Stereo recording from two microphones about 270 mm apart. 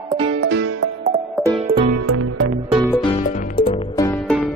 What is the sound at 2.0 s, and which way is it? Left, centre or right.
Music, right.